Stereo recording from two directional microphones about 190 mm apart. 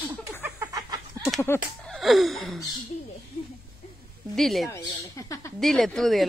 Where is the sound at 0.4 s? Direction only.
15° right (ahead or behind).